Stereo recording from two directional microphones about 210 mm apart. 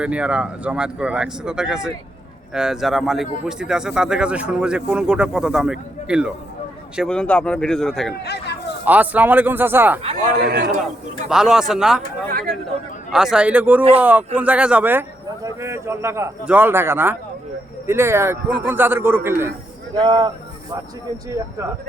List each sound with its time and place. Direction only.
0.0 s speech: 5° right (ahead or behind)
8.1 s speech: 50° left (ahead or behind)
8.8 s a man's voice: 10° right (ahead or behind)
10.3 s a man's voice: 50° right (ahead or behind)
11.3 s a man's voice: 5° right (ahead or behind)
20.0 s speech: 20° right (ahead or behind)